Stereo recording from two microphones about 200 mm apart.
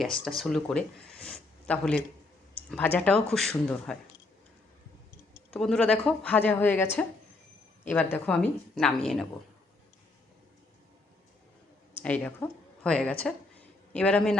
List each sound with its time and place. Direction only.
0.0 s a woman's voice: centre (ahead or behind)
5.5 s a woman's voice: 5° left (ahead or behind)
12.0 s a woman's voice: 10° left (ahead or behind)